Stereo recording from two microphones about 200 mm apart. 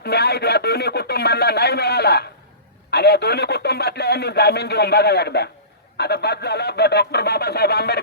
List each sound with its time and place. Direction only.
0.0 s speech: 55° left (ahead or behind)